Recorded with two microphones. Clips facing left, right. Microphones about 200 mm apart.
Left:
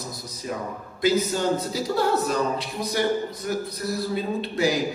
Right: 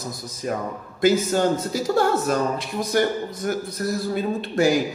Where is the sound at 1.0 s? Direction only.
50° right (ahead or behind).